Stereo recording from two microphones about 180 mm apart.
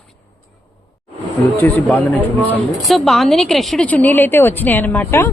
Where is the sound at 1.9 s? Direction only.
10° left (ahead or behind).